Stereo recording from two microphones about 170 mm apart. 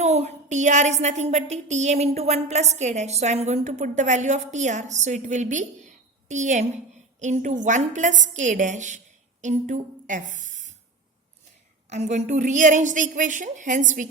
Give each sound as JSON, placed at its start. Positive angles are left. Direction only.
{"t": 0.0, "sound": "a woman's voice", "side_deg": -40}
{"t": 11.9, "sound": "a woman's voice", "side_deg": -40}